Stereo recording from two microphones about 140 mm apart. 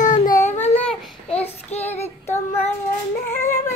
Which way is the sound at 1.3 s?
50° left (ahead or behind).